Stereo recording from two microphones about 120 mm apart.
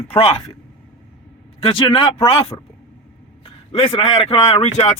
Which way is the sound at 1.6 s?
50° left (ahead or behind).